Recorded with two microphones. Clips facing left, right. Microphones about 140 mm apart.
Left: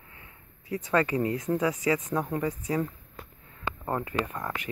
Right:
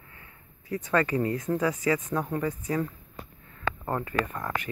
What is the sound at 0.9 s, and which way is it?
Speech, 20° left (ahead or behind).